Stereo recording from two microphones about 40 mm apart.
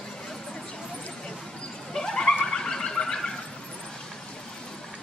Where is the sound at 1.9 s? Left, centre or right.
Centre.